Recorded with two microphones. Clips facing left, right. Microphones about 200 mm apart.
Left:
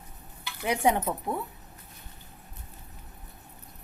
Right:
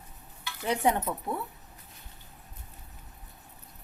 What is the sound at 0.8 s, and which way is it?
Speech, 20° left (ahead or behind).